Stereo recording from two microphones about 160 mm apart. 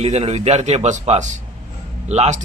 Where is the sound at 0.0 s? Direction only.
40° right (ahead or behind).